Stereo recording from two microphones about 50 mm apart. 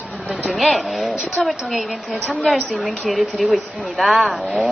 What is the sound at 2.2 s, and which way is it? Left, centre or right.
Speech, right.